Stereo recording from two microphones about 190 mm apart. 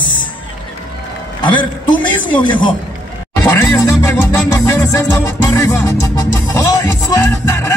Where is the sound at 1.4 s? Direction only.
25° left (ahead or behind).